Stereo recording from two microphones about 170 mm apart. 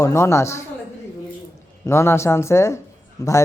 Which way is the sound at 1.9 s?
15° left (ahead or behind).